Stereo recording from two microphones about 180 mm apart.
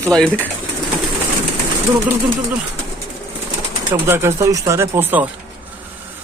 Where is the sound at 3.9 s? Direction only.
15° right (ahead or behind).